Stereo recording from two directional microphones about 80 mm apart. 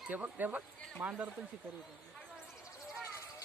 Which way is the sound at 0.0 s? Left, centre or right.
Centre.